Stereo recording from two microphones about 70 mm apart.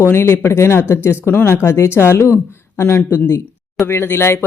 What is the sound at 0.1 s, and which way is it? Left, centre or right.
Speech, left.